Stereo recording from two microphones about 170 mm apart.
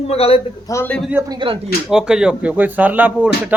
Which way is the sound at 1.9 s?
5° right (ahead or behind).